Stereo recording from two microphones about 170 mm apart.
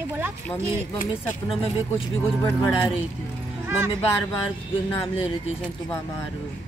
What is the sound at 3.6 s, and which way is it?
Speech, 15° right (ahead or behind).